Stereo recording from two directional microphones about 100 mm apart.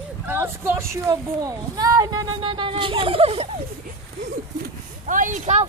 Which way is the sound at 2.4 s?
60° right (ahead or behind).